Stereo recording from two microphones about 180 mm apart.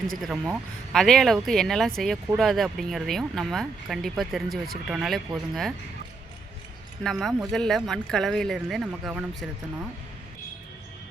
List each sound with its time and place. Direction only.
0.2 s speech: centre (ahead or behind)
7.0 s speech: centre (ahead or behind)